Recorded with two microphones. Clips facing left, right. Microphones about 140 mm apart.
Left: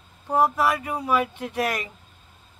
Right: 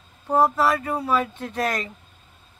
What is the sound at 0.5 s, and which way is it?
Speech, 15° left (ahead or behind).